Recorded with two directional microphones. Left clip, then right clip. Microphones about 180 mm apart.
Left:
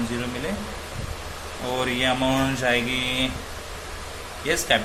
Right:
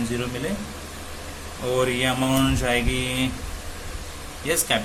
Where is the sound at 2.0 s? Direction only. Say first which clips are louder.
Even; 15° right (ahead or behind).